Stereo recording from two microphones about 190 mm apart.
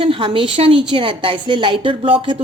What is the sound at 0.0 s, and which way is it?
A woman's voice, 30° right (ahead or behind).